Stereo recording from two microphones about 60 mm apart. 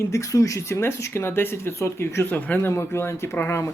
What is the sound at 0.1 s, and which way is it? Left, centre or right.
Speech, left.